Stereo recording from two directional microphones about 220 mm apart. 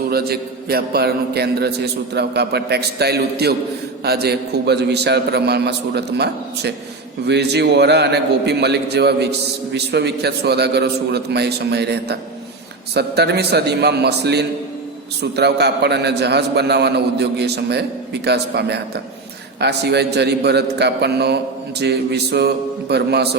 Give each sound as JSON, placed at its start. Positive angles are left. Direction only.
{"t": 0.1, "sound": "a man's voice", "side_deg": -45}